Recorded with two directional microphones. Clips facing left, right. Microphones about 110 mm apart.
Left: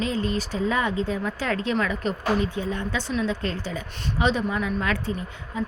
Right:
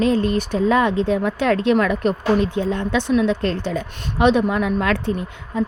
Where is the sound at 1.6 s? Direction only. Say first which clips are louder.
Right 8 dB; 65° right (ahead or behind); by 5.1 s 90° right.